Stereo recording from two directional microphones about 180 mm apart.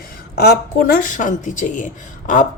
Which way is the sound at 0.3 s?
60° left (ahead or behind).